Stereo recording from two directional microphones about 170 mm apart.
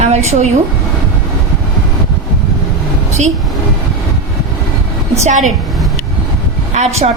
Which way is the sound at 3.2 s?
40° right (ahead or behind).